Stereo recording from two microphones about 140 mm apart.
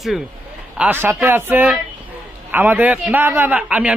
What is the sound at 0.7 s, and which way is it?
Speech, 10° right (ahead or behind).